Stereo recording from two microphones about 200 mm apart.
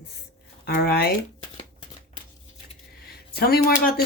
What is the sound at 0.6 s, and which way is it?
Speech, 50° left (ahead or behind).